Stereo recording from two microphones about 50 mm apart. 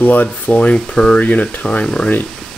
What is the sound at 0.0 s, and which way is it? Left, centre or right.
Speech, left.